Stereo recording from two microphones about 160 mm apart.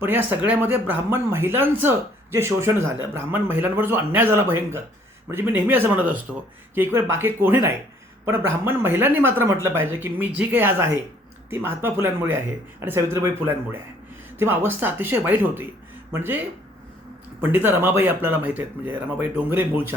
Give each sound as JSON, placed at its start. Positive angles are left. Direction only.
{"t": 0.0, "sound": "speech", "side_deg": -10}